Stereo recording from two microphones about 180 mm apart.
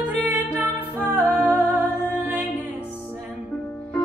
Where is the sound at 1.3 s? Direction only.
10° left (ahead or behind).